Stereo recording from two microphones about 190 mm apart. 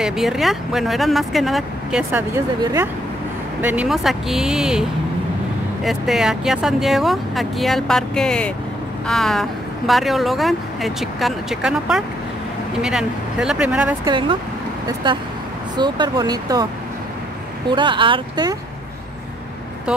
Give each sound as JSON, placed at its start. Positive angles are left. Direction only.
{"t": 0.0, "sound": "speech", "side_deg": 0}
{"t": 3.6, "sound": "speech", "side_deg": -5}
{"t": 5.9, "sound": "speech", "side_deg": 0}
{"t": 14.0, "sound": "speech", "side_deg": -25}
{"t": 17.6, "sound": "speech", "side_deg": -25}